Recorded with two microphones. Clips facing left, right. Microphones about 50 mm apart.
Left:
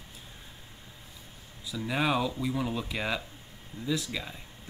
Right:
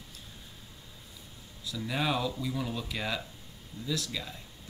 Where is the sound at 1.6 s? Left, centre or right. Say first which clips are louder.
Left 3 dB; centre.